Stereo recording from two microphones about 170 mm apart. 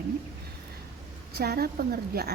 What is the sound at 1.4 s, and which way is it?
Speech, 65° right (ahead or behind).